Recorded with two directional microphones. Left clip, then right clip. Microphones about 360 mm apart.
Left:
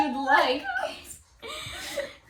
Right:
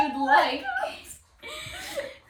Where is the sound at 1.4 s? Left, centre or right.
Centre.